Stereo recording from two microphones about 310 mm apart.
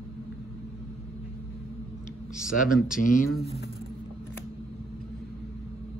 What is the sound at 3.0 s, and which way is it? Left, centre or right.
Speech, left.